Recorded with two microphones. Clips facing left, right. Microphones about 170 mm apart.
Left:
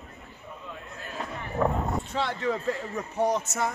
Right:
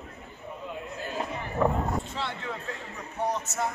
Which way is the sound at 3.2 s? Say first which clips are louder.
Left 4 dB; 90° left.